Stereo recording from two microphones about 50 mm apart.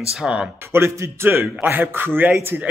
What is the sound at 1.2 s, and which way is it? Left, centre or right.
A man's voice, right.